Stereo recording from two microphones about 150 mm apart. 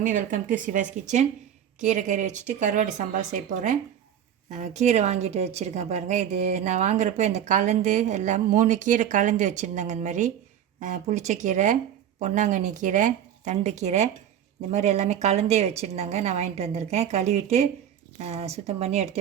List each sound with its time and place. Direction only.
0.0 s speech: 60° right (ahead or behind)
4.4 s a woman's voice: 50° right (ahead or behind)